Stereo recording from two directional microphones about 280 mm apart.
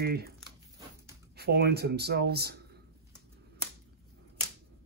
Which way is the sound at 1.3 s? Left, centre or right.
Right.